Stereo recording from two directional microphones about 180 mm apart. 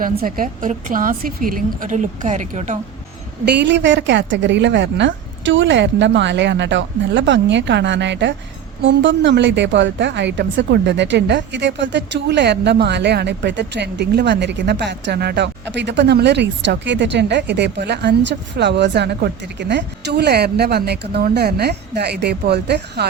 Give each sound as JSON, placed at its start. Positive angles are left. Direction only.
{"t": 0.0, "sound": "a woman's voice", "side_deg": -50}
{"t": 3.4, "sound": "a woman's voice", "side_deg": -70}
{"t": 8.8, "sound": "a woman's voice", "side_deg": -90}